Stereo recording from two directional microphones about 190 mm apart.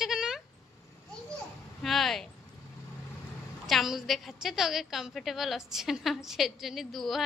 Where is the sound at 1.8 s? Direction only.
Centre (ahead or behind).